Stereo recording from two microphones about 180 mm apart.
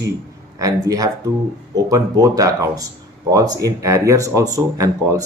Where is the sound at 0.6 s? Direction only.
20° right (ahead or behind).